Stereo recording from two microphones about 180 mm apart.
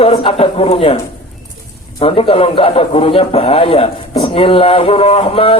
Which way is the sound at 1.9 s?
30° left (ahead or behind).